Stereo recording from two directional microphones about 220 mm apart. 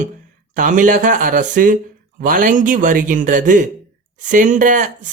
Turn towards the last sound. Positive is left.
turn(degrees=-35)  # may be behind; listen again after turning